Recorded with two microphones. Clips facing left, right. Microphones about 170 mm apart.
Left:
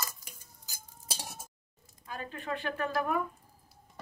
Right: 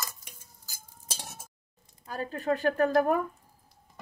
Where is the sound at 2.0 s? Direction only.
40° right (ahead or behind).